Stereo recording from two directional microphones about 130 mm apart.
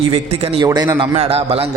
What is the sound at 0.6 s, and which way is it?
Speech, 35° right (ahead or behind).